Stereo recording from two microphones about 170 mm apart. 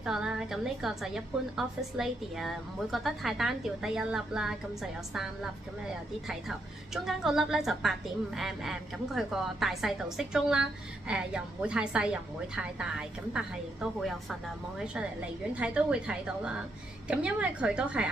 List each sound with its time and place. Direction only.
0.0 s a woman's voice: 5° right (ahead or behind)
6.9 s a woman's voice: centre (ahead or behind)
15.5 s a woman's voice: 5° right (ahead or behind)